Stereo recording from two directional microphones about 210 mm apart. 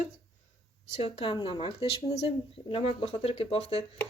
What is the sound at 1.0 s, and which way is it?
Speech, 25° left (ahead or behind).